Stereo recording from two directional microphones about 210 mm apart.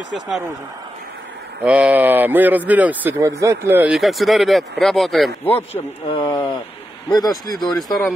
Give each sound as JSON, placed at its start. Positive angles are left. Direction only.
{"t": 1.6, "sound": "speech", "side_deg": -5}
{"t": 5.7, "sound": "speech", "side_deg": 25}
{"t": 7.4, "sound": "speech", "side_deg": 20}
{"t": 7.7, "sound": "speech", "side_deg": 0}